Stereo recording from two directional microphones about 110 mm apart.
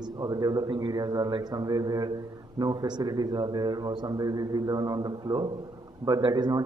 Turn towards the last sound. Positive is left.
turn(degrees=-45)  # may be behind; listen again after turning